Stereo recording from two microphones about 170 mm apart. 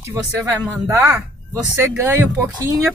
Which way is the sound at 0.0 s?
15° right (ahead or behind).